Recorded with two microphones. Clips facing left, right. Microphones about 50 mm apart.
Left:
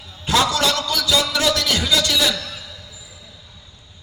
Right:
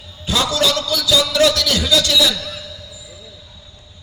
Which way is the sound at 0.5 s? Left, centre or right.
Left.